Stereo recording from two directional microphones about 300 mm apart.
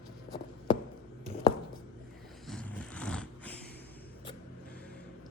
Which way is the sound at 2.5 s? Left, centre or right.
Centre.